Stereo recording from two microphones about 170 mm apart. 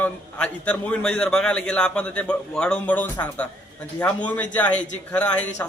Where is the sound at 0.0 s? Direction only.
5° left (ahead or behind).